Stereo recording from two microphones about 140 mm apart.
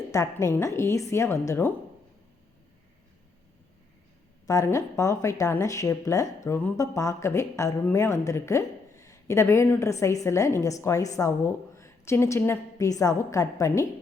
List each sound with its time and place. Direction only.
0.1 s a woman's voice: 20° left (ahead or behind)
4.4 s a woman's voice: 20° left (ahead or behind)